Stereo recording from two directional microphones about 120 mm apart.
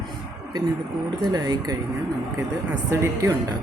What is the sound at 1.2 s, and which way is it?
Speech, 35° right (ahead or behind).